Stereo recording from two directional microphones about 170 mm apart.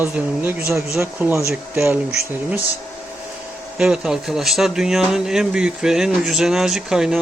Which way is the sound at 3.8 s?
5° right (ahead or behind).